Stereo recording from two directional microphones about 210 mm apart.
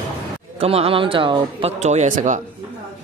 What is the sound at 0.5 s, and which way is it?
A woman's voice, 30° right (ahead or behind).